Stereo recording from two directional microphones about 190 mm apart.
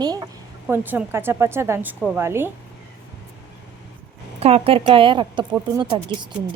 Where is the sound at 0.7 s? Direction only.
10° right (ahead or behind).